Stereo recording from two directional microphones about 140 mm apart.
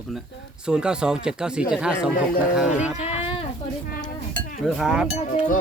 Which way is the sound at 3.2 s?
45° left (ahead or behind).